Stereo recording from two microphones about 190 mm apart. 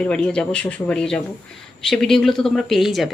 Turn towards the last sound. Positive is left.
turn(degrees=0)  # may be behind; listen again after turning